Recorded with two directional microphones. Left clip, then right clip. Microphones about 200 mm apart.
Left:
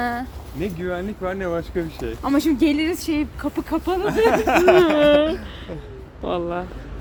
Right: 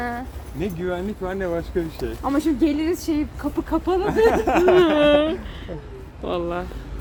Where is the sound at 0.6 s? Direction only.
Centre (ahead or behind).